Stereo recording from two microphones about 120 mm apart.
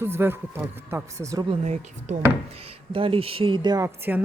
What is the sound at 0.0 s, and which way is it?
A woman's voice, 20° right (ahead or behind).